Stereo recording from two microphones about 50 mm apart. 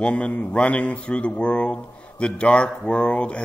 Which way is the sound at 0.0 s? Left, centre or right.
Left.